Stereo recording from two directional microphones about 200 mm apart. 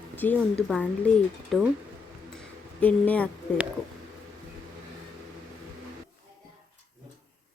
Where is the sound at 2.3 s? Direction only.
5° left (ahead or behind).